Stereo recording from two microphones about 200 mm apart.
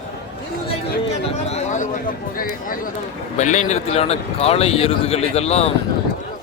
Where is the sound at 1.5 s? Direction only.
35° left (ahead or behind).